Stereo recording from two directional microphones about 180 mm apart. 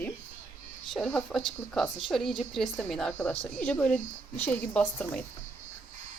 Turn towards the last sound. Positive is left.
turn(degrees=5)  # may be behind; listen again after turning